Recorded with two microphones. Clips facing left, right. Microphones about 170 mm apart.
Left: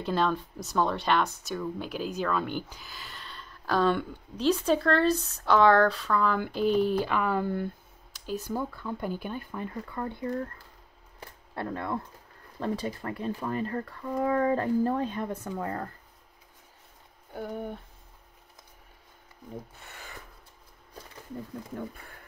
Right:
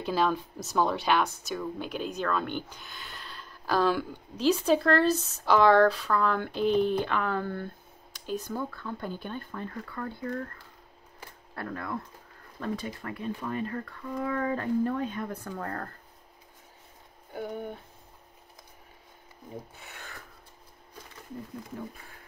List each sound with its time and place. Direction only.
0.0 s speech: 5° right (ahead or behind); by 10.4 s 20° left (ahead or behind)
11.5 s speech: 25° left (ahead or behind)
17.3 s speech: centre (ahead or behind)
19.5 s speech: centre (ahead or behind)